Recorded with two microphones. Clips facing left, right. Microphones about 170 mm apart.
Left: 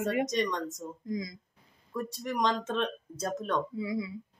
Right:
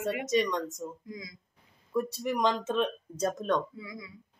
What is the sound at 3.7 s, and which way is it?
Speech, 25° left (ahead or behind).